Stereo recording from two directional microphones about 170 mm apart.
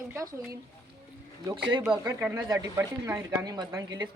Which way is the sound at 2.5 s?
20° right (ahead or behind).